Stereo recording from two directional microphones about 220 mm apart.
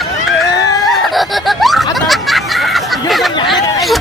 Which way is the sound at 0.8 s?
Centre (ahead or behind).